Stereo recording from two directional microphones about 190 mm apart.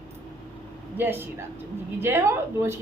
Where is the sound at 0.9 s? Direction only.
10° right (ahead or behind).